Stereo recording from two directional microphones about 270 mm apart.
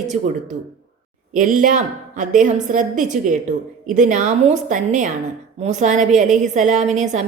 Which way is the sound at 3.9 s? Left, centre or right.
Right.